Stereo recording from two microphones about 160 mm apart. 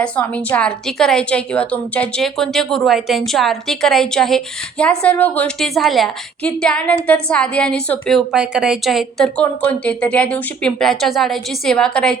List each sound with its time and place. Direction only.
0.0 s a woman's voice: 5° left (ahead or behind)